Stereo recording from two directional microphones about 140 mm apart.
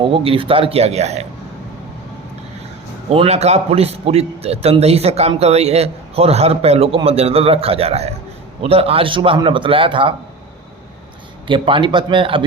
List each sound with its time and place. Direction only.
0.0 s a man's voice: 40° right (ahead or behind)
3.1 s a man's voice: 45° right (ahead or behind)
11.4 s a man's voice: 35° right (ahead or behind)